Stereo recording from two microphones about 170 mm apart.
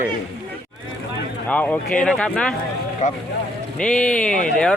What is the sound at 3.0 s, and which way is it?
Speech, 45° left (ahead or behind).